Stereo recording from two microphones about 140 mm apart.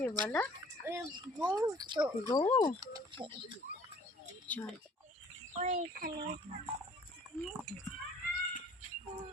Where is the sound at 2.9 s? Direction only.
35° right (ahead or behind).